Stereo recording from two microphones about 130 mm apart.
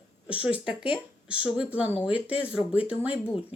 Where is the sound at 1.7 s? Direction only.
10° right (ahead or behind).